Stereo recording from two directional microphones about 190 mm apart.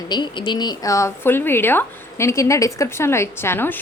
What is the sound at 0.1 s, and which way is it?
Speech, 25° left (ahead or behind).